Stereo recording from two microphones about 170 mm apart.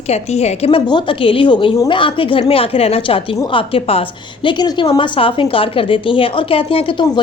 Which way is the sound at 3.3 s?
20° left (ahead or behind).